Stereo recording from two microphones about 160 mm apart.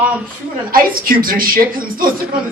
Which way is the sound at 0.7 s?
65° right (ahead or behind).